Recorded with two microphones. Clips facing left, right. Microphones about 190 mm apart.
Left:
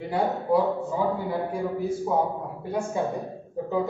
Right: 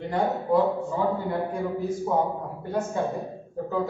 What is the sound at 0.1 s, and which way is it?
A man's voice, 10° left (ahead or behind).